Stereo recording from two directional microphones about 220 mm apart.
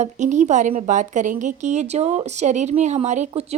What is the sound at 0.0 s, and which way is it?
A woman's voice, 35° right (ahead or behind).